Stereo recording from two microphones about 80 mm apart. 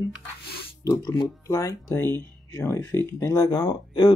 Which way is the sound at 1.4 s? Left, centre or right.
Left.